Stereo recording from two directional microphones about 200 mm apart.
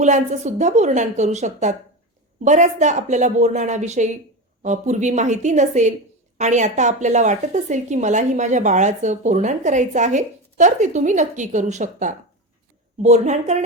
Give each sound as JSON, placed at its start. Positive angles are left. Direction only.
{"t": 0.0, "sound": "a woman's voice", "side_deg": -35}